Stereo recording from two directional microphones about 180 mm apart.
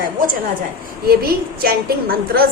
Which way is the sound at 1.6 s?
55° right (ahead or behind).